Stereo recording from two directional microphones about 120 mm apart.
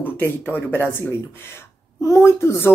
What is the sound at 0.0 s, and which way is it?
Speech, 15° left (ahead or behind).